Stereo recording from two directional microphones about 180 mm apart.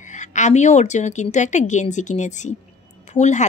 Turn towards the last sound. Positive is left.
turn(degrees=40)  # may be behind; listen again after turning